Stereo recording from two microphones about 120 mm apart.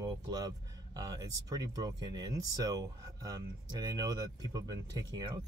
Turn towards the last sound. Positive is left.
turn(degrees=-35)  # may be behind; listen again after turning